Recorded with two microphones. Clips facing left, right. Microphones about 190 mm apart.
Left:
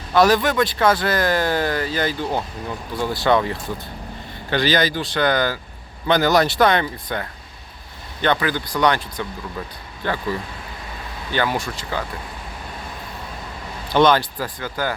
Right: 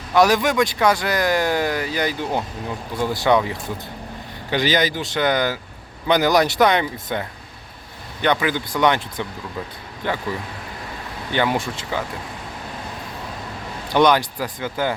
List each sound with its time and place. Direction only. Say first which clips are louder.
0.1 s speech: even; 15° right (ahead or behind)
4.5 s speech: left 1 dB; 15° right (ahead or behind)
11.3 s speech: right 1 dB; 20° right (ahead or behind)
13.9 s speech: even; 15° right (ahead or behind)